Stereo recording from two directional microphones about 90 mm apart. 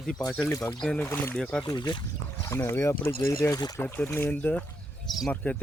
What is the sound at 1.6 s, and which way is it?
Speech, 55° left (ahead or behind).